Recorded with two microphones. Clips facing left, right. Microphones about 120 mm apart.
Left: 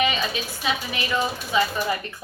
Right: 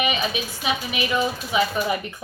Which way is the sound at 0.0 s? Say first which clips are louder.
Even; 15° right (ahead or behind).